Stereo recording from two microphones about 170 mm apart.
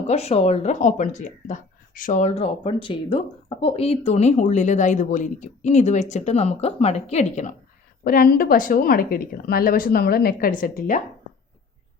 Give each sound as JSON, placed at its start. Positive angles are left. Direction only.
{"t": 0.1, "sound": "speech", "side_deg": 40}
{"t": 8.0, "sound": "a woman's voice", "side_deg": 60}